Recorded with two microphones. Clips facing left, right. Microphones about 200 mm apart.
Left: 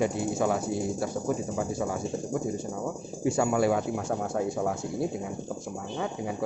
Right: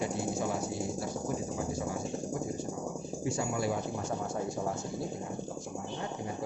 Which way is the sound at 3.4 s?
70° left (ahead or behind).